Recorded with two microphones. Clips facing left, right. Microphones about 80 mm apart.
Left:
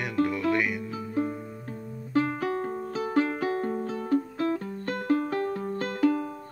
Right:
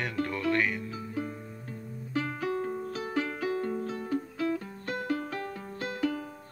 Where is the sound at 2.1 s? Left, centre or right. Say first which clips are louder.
Left 5 dB; left.